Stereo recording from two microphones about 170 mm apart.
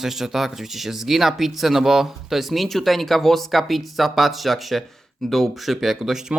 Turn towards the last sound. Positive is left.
turn(degrees=0)  # may be behind; listen again after turning